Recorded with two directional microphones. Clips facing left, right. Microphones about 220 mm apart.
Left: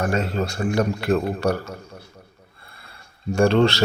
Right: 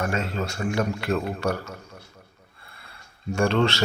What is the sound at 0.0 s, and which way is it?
Speech, 40° left (ahead or behind).